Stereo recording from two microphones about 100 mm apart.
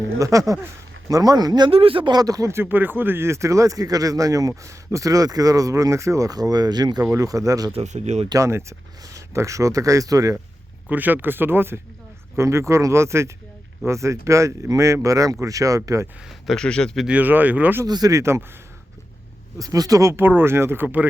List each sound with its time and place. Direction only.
0.2 s speech: 35° right (ahead or behind)
1.7 s speech: 65° right (ahead or behind)
2.1 s speech: 35° right (ahead or behind)
7.7 s speech: 90° right
8.3 s speech: 30° right (ahead or behind)
10.8 s speech: 15° right (ahead or behind); by 16.0 s 35° right (ahead or behind)
16.6 s speech: 10° left (ahead or behind)
17.1 s speech: 15° right (ahead or behind)
17.8 s speech: 40° right (ahead or behind)
19.5 s speech: 40° right (ahead or behind); by 21.1 s 15° right (ahead or behind)